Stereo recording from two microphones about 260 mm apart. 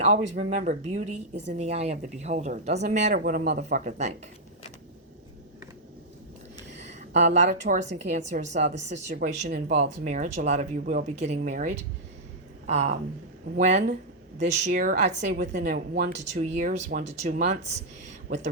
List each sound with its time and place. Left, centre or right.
0.0 s speech: right
7.2 s speech: right
15.1 s a woman's voice: right
15.4 s speech: right